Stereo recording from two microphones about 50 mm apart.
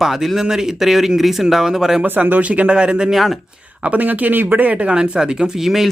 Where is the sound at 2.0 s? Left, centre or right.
Right; by 3.1 s centre.